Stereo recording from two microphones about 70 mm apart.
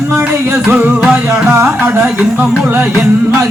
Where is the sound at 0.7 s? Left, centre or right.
Right.